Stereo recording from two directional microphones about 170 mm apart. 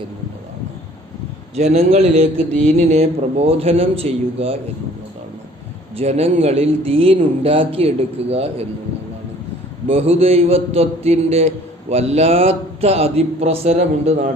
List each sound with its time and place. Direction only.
1.7 s a man's voice: 40° right (ahead or behind)
6.0 s a man's voice: 35° right (ahead or behind)
9.9 s a man's voice: 35° right (ahead or behind)